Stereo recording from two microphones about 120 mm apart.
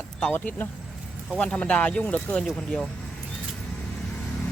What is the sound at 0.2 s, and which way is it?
Speech, 15° left (ahead or behind).